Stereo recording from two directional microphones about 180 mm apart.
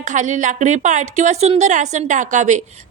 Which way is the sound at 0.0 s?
40° right (ahead or behind).